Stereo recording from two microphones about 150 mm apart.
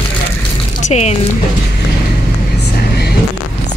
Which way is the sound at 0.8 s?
45° left (ahead or behind).